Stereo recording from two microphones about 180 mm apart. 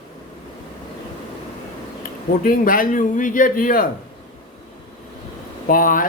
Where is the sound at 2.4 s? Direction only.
50° left (ahead or behind).